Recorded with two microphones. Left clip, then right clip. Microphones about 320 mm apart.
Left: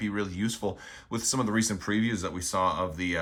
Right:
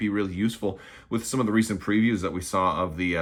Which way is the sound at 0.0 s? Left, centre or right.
Centre.